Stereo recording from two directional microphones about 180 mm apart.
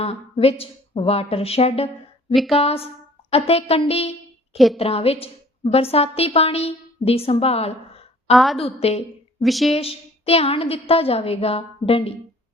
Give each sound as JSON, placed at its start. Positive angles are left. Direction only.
{"t": 0.0, "sound": "a woman's voice", "side_deg": 35}
{"t": 2.3, "sound": "speech", "side_deg": 0}
{"t": 2.6, "sound": "speech", "side_deg": 35}
{"t": 4.5, "sound": "speech", "side_deg": 0}
{"t": 4.8, "sound": "a woman's voice", "side_deg": 35}
{"t": 9.4, "sound": "speech", "side_deg": 0}
{"t": 9.7, "sound": "a woman's voice", "side_deg": 35}